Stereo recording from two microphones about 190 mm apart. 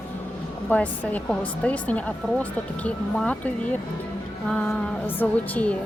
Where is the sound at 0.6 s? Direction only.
10° left (ahead or behind).